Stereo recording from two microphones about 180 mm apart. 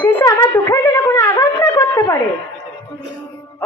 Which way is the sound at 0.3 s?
20° left (ahead or behind).